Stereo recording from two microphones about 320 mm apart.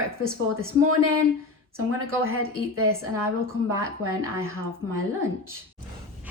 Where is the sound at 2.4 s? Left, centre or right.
Right.